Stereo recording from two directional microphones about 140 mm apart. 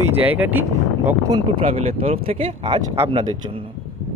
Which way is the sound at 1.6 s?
50° right (ahead or behind).